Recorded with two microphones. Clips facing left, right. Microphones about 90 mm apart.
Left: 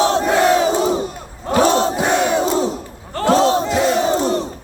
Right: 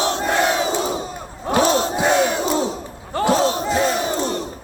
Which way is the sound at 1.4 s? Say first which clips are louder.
Left 3 dB; 20° right (ahead or behind).